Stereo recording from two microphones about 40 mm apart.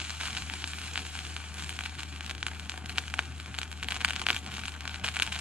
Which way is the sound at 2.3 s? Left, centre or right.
Right.